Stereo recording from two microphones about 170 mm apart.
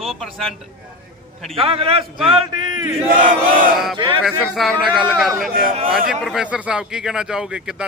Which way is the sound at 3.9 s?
30° right (ahead or behind).